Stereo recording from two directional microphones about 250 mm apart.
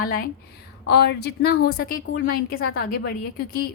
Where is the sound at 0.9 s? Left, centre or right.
Left.